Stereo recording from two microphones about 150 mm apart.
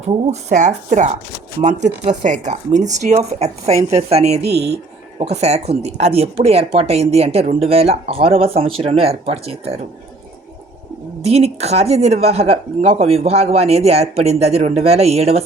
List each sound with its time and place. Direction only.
0.1 s speech: 50° right (ahead or behind)
11.2 s speech: 45° right (ahead or behind)